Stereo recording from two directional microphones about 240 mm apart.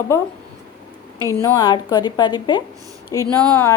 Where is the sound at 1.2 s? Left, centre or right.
Centre.